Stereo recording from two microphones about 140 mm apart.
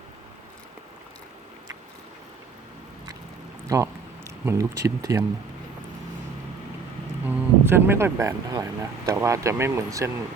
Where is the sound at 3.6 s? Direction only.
20° right (ahead or behind).